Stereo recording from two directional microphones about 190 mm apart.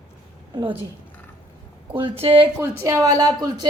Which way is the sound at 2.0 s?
30° right (ahead or behind).